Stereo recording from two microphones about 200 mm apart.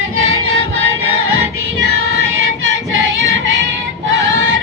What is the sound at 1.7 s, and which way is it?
Music, 70° right (ahead or behind).